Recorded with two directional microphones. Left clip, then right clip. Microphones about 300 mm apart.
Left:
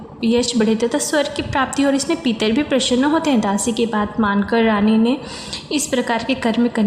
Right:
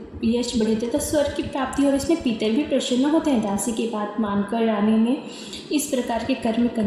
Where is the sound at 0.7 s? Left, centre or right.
Left.